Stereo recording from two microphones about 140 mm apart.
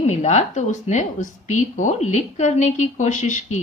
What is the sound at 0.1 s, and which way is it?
A woman's voice, 55° left (ahead or behind).